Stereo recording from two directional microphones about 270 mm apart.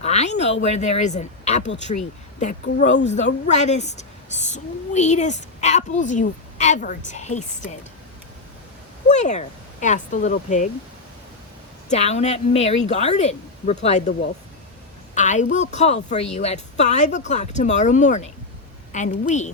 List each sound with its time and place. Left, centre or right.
0.0 s a woman's voice: left
9.0 s speech: left
11.9 s a woman's voice: left
15.1 s a woman's voice: left